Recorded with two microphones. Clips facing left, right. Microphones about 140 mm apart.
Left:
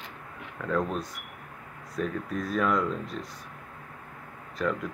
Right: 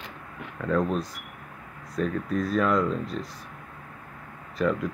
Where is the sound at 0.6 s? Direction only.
5° right (ahead or behind).